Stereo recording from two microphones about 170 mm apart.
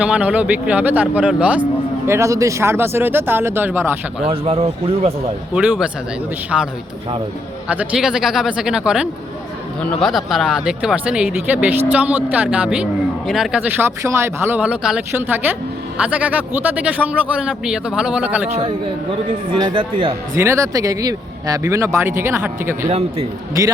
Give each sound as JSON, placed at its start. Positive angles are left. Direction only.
{"t": 0.0, "sound": "speech", "side_deg": -5}
{"t": 2.0, "sound": "speech", "side_deg": -15}
{"t": 4.2, "sound": "speech", "side_deg": -35}
{"t": 5.5, "sound": "speech", "side_deg": -5}
{"t": 7.7, "sound": "speech", "side_deg": -5}
{"t": 18.4, "sound": "speech", "side_deg": -40}
{"t": 19.6, "sound": "speech", "side_deg": -30}
{"t": 20.3, "sound": "speech", "side_deg": -15}
{"t": 22.9, "sound": "speech", "side_deg": -40}